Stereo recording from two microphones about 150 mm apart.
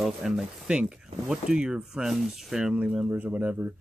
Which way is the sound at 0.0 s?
Centre (ahead or behind).